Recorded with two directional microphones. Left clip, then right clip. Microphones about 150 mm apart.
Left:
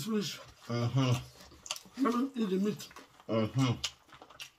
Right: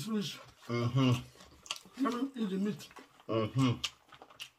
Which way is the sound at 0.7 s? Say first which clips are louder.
Right 1 dB; 20° right (ahead or behind).